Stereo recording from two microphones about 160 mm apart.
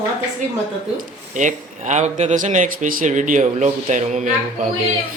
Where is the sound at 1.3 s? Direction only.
50° right (ahead or behind).